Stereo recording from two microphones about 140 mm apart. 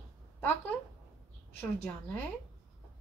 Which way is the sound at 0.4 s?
15° left (ahead or behind).